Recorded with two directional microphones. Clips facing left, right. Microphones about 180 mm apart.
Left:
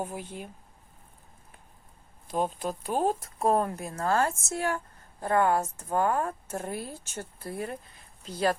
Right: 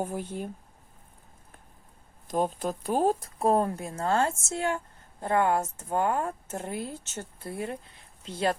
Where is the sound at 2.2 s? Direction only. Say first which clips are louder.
Right 2 dB; 45° right (ahead or behind); by 8.6 s 25° right (ahead or behind).